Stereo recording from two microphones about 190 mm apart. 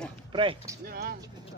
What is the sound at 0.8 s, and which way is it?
Speech, 50° right (ahead or behind).